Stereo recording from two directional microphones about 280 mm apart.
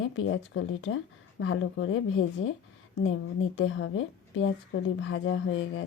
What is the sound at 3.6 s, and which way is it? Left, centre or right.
Speech, left.